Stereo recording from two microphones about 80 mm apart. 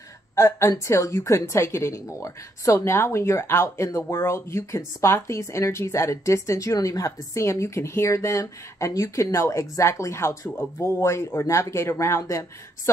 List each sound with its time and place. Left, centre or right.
0.4 s a woman's voice: left